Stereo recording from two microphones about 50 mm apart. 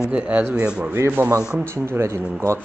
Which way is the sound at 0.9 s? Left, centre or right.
Right.